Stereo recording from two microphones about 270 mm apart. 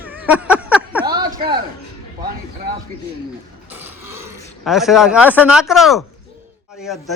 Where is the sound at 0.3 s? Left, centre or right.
Centre.